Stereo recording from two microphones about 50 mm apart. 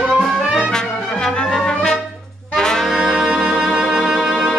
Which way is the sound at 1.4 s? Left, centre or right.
Centre.